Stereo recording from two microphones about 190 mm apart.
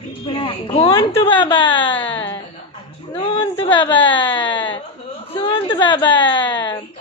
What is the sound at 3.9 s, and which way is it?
Speech, 10° left (ahead or behind).